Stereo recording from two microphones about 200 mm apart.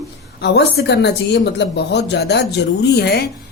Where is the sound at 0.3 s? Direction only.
55° left (ahead or behind).